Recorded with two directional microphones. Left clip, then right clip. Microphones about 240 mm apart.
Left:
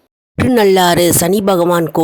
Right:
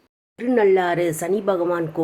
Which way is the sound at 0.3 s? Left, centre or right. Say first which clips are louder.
Left 7 dB; left.